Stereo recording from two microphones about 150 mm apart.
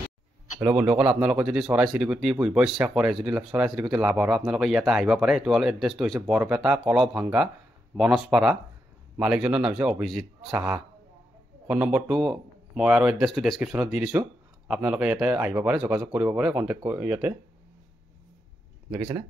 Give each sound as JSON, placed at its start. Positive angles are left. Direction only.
{"t": 0.6, "sound": "speech", "side_deg": -10}
{"t": 18.9, "sound": "speech", "side_deg": -25}